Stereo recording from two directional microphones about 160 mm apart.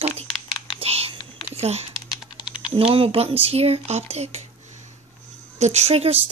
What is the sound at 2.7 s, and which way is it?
Speech, 35° right (ahead or behind).